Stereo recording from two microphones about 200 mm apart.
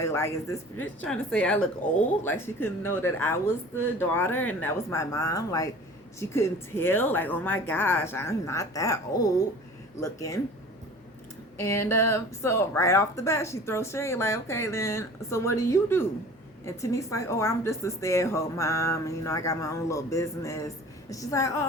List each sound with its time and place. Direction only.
0.0 s a woman's voice: 15° left (ahead or behind)
11.5 s speech: 15° left (ahead or behind)